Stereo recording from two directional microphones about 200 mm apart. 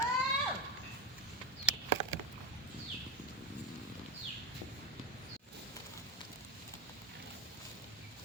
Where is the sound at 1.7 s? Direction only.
5° right (ahead or behind).